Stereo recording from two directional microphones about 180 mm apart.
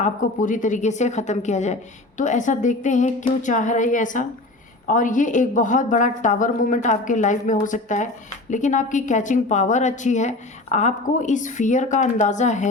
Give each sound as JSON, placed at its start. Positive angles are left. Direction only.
{"t": 0.0, "sound": "a woman's voice", "side_deg": 45}